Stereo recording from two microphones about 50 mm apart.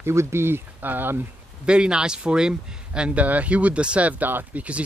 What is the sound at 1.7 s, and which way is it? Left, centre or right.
Speech, centre.